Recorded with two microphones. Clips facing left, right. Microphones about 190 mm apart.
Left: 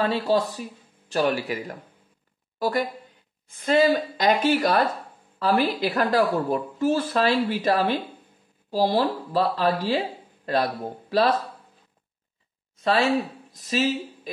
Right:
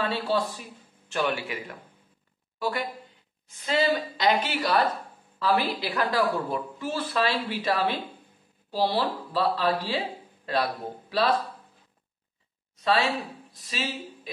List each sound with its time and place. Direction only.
0.0 s speech: 40° left (ahead or behind)
3.4 s a woman's voice: 50° left (ahead or behind)
12.8 s speech: 45° left (ahead or behind)